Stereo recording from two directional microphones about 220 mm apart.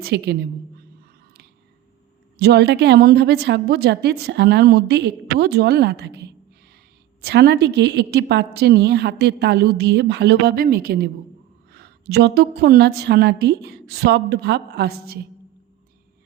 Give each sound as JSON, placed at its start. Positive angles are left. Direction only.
{"t": 0.0, "sound": "a woman's voice", "side_deg": -45}
{"t": 2.4, "sound": "a woman's voice", "side_deg": -50}